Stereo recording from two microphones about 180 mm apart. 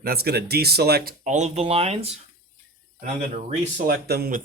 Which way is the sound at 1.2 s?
40° right (ahead or behind).